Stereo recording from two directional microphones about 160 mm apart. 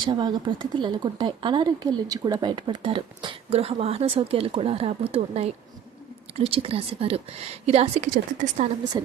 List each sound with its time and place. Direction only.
0.0 s a woman's voice: 30° right (ahead or behind); by 8.6 s 50° right (ahead or behind)